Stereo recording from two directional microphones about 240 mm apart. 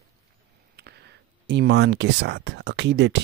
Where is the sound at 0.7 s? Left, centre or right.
Right.